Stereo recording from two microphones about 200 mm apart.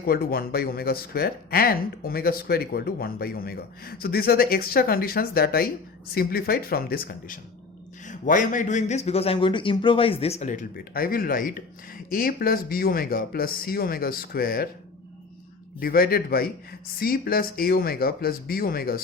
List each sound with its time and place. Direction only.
0.0 s a man's voice: 50° left (ahead or behind)
15.8 s speech: 50° left (ahead or behind)